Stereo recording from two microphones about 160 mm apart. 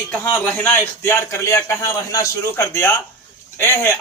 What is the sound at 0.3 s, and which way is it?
A man's voice, 10° left (ahead or behind).